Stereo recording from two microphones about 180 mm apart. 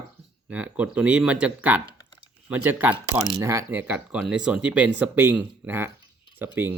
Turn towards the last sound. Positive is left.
turn(degrees=-10)  # may be behind; listen again after turning